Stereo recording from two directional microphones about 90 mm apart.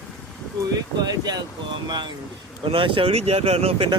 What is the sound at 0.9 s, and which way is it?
Speech, 50° right (ahead or behind).